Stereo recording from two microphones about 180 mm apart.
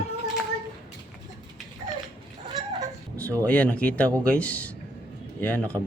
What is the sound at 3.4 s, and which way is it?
Speech, 5° left (ahead or behind).